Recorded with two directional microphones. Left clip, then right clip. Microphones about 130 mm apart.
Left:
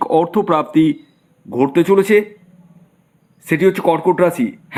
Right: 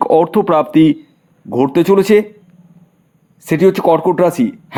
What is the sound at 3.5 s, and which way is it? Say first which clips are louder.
A man's voice: right 3 dB; 35° right (ahead or behind).